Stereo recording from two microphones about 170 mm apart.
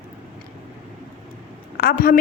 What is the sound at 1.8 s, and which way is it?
Speech, 60° left (ahead or behind).